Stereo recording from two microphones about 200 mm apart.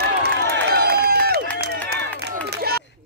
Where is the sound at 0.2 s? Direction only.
50° right (ahead or behind).